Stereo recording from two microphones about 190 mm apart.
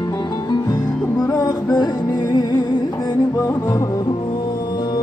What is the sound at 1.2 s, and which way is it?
Music, 20° left (ahead or behind).